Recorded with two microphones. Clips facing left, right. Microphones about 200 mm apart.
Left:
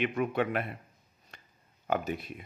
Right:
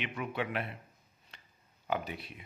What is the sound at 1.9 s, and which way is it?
Speech, 45° left (ahead or behind).